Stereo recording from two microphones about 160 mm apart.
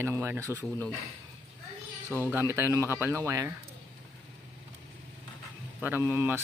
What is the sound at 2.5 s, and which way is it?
Speech, 15° right (ahead or behind).